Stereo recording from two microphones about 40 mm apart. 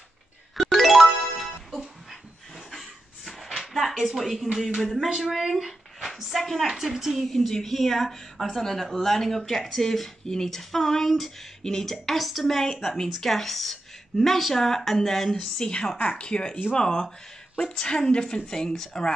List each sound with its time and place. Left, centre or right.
0.6 s music: centre
1.7 s a sound: centre
4.2 s speech: centre
6.7 s a woman's voice: centre
7.2 s speech: centre
12.8 s speech: centre
13.1 s speech: centre
15.3 s speech: centre
17.6 s speech: centre